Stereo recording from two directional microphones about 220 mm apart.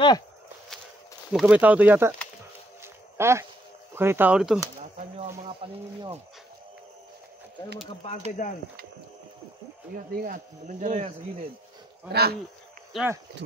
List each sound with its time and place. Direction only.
1.3 s speech: 5° right (ahead or behind)
2.8 s a sound: 10° right (ahead or behind)
3.9 s speech: 10° right (ahead or behind)
5.6 s speech: 25° right (ahead or behind)
8.4 s speech: 35° left (ahead or behind)
9.9 s speech: 35° right (ahead or behind)
12.1 s speech: 45° right (ahead or behind)
12.9 s speech: 5° right (ahead or behind)